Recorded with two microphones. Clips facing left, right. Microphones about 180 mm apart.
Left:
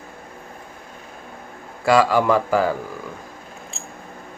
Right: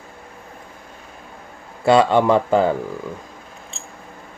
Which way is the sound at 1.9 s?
25° right (ahead or behind).